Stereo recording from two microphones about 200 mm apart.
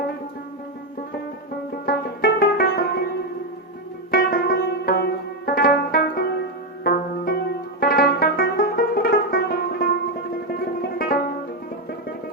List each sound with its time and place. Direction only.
1.9 s music: 50° left (ahead or behind)
4.1 s music: 50° left (ahead or behind)